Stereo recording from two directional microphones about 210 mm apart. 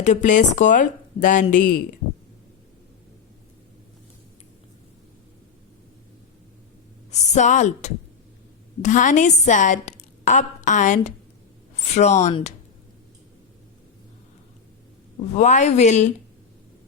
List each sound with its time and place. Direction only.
0.0 s a woman's voice: 35° left (ahead or behind)
7.1 s a woman's voice: 35° left (ahead or behind)
15.4 s a woman's voice: 35° left (ahead or behind)